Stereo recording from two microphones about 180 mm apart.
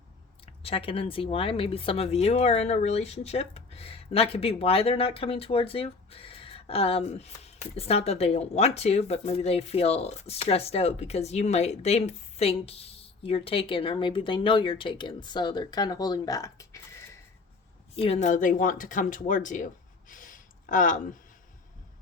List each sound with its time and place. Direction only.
0.4 s speech: 30° left (ahead or behind); by 17.2 s 15° left (ahead or behind)
17.9 s speech: 35° left (ahead or behind)